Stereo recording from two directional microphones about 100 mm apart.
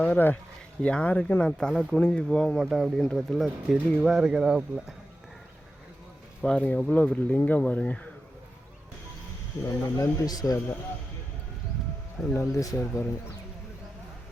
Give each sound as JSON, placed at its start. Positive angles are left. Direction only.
{"t": 0.0, "sound": "speech", "side_deg": 20}
{"t": 2.6, "sound": "speech", "side_deg": -5}
{"t": 3.0, "sound": "speech", "side_deg": 10}
{"t": 6.4, "sound": "speech", "side_deg": 10}
{"t": 9.6, "sound": "speech", "side_deg": 35}
{"t": 12.2, "sound": "speech", "side_deg": 0}
{"t": 12.5, "sound": "speech", "side_deg": 30}